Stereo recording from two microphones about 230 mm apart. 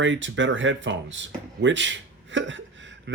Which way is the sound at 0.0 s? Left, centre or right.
Right.